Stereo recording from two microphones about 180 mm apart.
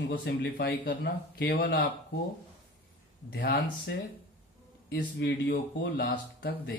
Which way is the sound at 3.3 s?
65° left (ahead or behind).